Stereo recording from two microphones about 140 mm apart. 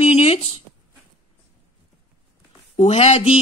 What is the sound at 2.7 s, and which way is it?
Speech, 50° left (ahead or behind).